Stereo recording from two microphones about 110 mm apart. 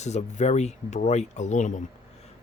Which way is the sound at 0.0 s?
90° left.